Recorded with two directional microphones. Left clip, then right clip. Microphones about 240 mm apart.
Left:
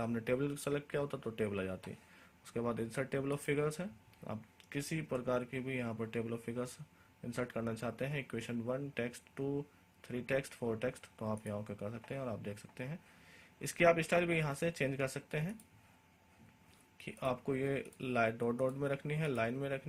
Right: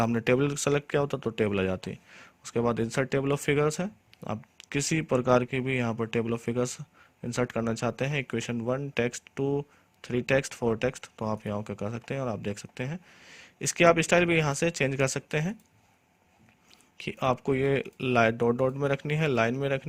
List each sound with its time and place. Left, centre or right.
0.0 s speech: right
17.0 s speech: right